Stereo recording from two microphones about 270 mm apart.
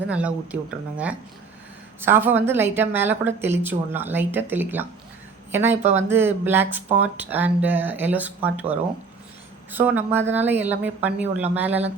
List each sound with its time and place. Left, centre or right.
0.1 s a woman's voice: centre